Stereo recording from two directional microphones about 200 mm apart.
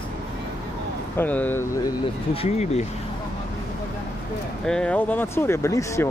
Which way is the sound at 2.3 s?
35° left (ahead or behind).